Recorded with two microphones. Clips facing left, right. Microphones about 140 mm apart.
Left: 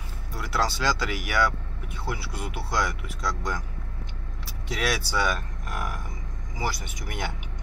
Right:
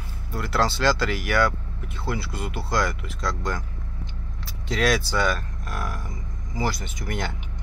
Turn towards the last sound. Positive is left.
turn(degrees=10)  # may be behind; listen again after turning